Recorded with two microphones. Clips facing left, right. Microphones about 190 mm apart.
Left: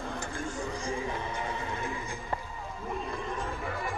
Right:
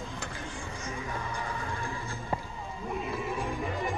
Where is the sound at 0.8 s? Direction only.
25° left (ahead or behind).